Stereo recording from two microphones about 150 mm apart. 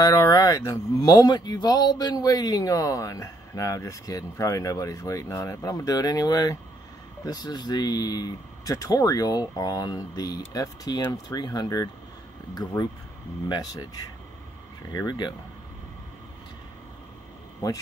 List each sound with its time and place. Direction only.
0.0 s speech: 25° left (ahead or behind)
13.5 s speech: 25° left (ahead or behind)
14.9 s speech: 25° left (ahead or behind)